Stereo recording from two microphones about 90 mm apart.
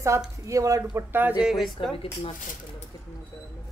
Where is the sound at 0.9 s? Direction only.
20° right (ahead or behind).